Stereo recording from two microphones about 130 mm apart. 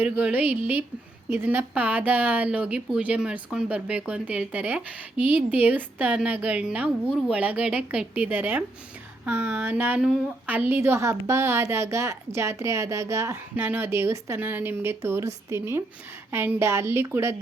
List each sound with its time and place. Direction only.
0.0 s speech: 10° right (ahead or behind)